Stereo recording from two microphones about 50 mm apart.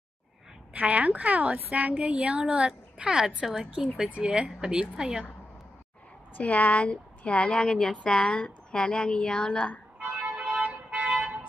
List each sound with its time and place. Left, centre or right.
0.7 s a woman's voice: right
3.4 s speech: centre
3.7 s a woman's voice: right
6.3 s a woman's voice: left
10.3 s a sound: centre
10.6 s vehicle: right
11.1 s vehicle: centre